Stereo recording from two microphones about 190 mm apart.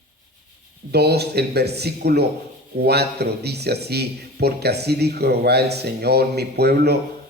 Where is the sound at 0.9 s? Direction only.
60° right (ahead or behind).